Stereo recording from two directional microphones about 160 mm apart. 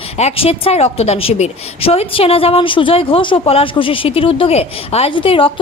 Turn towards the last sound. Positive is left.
turn(degrees=35)  # may be behind; listen again after turning